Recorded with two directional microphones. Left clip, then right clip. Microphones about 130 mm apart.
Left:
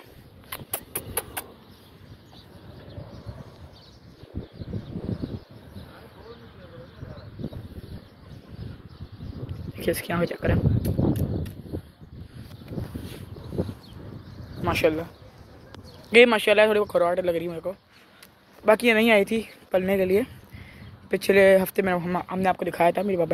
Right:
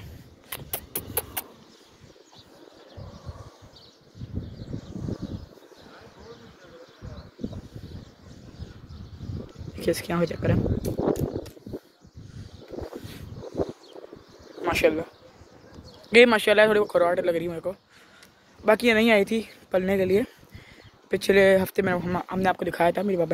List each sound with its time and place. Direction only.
0.7 s clip-clop: 35° right (ahead or behind)
9.8 s speech: 35° right (ahead or behind)
14.6 s speech: 35° right (ahead or behind)
16.1 s speech: 25° right (ahead or behind)
18.7 s speech: 10° right (ahead or behind)